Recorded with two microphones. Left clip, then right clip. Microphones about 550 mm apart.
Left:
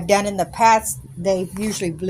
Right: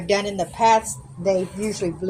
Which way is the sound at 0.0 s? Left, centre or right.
Left.